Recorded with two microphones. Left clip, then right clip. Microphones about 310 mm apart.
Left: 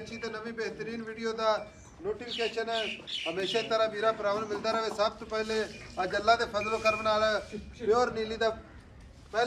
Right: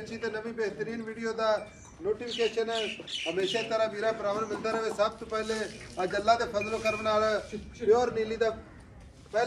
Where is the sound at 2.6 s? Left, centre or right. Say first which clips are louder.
Even; left.